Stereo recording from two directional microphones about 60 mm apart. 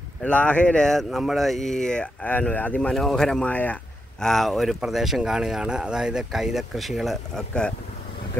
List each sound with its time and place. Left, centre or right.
0.2 s speech: left
0.8 s speech: centre
2.2 s speech: left
2.9 s speech: centre
3.4 s speech: left
4.2 s speech: centre
7.3 s speech: centre